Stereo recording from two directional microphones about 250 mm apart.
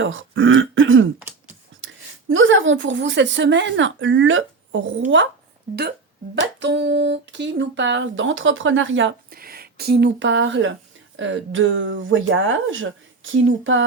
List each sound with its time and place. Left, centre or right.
0.0 s speech: right
2.3 s speech: right
6.3 s speech: right